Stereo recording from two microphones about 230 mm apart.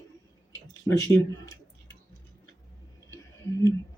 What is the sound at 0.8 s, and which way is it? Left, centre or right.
Speech, centre.